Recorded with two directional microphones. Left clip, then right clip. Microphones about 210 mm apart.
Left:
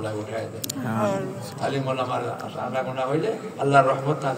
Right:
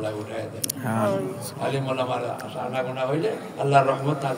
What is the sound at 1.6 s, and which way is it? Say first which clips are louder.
A man's voice: even; 55° right (ahead or behind).